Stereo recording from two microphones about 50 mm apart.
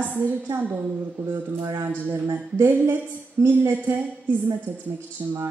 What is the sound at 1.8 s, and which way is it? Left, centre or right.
A woman's voice, right.